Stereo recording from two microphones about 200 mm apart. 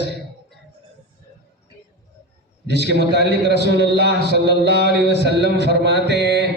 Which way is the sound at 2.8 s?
55° right (ahead or behind).